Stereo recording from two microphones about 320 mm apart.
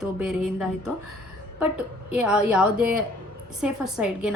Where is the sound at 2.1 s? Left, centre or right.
Centre.